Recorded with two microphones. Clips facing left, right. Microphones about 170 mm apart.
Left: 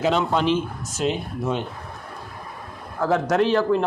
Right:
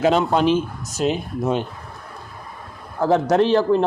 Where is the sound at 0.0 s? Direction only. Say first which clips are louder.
Right 4 dB; 45° right (ahead or behind).